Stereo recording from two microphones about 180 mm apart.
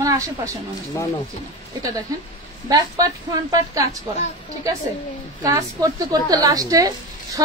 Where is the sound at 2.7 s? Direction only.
20° right (ahead or behind).